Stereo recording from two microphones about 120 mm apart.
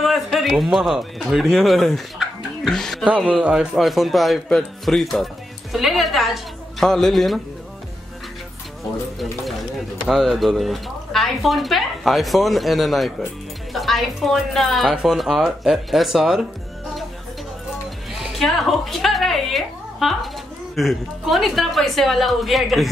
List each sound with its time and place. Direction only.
0.0 s a man's voice: centre (ahead or behind)
3.2 s a man's voice: 10° right (ahead or behind)
10.0 s speech: 5° right (ahead or behind)
18.2 s a woman's voice: centre (ahead or behind)